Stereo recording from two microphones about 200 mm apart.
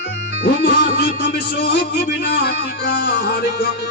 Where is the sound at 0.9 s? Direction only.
50° left (ahead or behind).